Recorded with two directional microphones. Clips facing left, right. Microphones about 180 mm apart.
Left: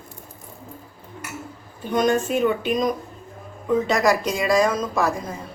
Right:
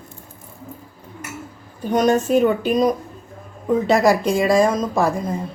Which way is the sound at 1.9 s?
40° right (ahead or behind).